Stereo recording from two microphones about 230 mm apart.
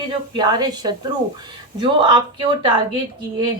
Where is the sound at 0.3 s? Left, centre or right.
Centre.